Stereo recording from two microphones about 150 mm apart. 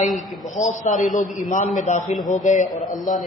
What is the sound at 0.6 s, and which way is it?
A man's voice, 55° left (ahead or behind).